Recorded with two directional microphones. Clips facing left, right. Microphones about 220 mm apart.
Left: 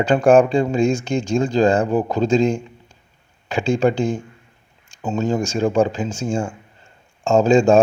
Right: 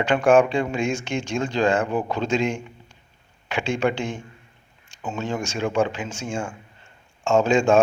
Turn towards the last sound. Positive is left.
turn(degrees=35)  # may be behind; listen again after turning